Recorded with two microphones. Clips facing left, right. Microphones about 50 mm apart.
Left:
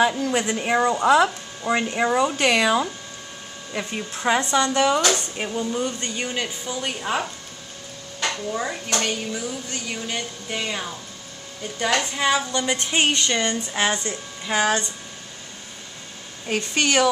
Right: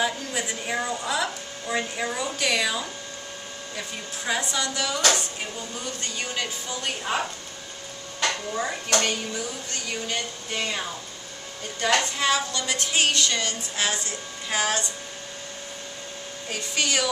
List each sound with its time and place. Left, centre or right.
0.0 s a woman's voice: left
5.4 s speech: left
6.2 s a woman's voice: centre
12.5 s speech: left
16.4 s a woman's voice: left